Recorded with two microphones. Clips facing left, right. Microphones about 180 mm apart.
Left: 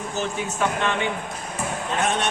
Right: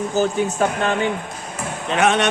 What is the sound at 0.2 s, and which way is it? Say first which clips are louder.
Speech: right 7 dB; 40° right (ahead or behind).